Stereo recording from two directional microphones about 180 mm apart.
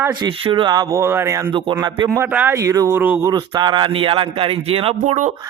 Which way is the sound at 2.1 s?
10° right (ahead or behind).